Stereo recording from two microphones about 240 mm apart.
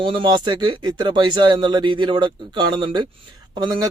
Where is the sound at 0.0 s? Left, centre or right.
Centre.